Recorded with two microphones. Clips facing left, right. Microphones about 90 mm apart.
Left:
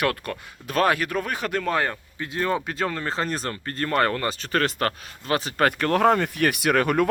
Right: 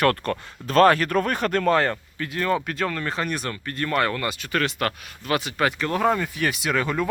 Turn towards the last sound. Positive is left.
turn(degrees=60)  # may be behind; listen again after turning